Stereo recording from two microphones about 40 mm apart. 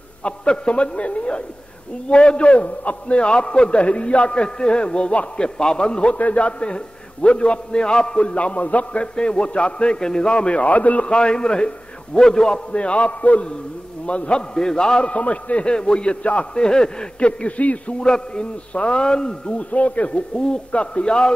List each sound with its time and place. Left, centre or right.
0.2 s a man's voice: left
6.1 s a man's voice: left
9.0 s a man's voice: left
11.1 s a man's voice: left
12.7 s a man's voice: left
16.5 s a man's voice: centre
17.3 s a man's voice: left
17.9 s a man's voice: centre; by 20.2 s left
20.2 s a man's voice: centre